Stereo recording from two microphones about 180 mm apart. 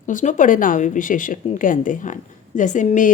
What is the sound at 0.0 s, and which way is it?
A woman's voice, 45° left (ahead or behind).